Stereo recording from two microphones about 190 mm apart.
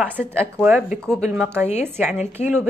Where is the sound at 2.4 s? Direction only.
35° left (ahead or behind).